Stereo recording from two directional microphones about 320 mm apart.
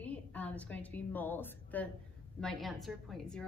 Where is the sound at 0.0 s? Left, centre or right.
Centre.